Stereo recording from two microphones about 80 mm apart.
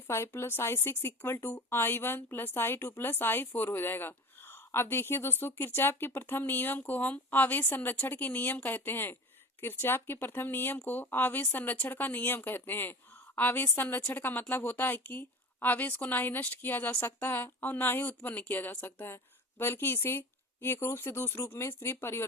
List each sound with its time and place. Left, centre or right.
0.1 s a woman's voice: left